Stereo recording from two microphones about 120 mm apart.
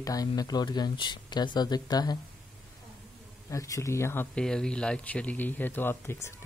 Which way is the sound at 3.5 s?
25° left (ahead or behind).